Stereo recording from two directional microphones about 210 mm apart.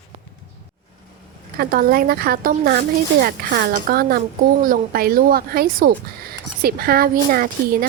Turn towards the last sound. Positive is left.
turn(degrees=-45)  # may be behind; listen again after turning